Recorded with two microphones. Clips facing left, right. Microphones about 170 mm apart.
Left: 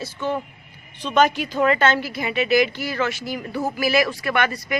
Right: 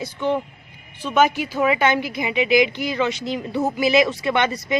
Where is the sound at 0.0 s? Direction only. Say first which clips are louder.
Right 3 dB; 15° right (ahead or behind).